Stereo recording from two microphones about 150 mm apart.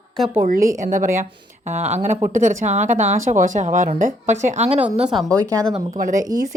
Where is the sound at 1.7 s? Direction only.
50° right (ahead or behind).